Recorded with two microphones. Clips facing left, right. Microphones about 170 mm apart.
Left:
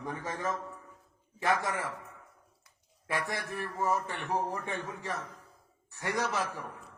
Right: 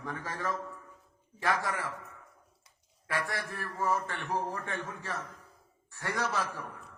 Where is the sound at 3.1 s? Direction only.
20° left (ahead or behind).